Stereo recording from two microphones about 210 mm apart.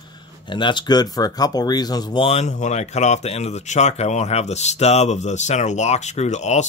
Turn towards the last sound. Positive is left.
turn(degrees=35)  # may be behind; listen again after turning